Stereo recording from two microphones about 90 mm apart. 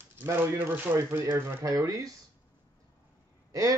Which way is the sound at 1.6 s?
40° right (ahead or behind).